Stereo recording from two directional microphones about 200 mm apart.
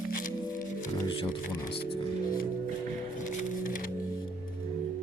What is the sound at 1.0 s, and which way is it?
Music, 25° left (ahead or behind).